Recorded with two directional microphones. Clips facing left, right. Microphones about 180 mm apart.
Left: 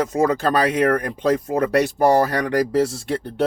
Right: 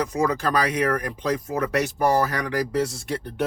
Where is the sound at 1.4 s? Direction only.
35° left (ahead or behind).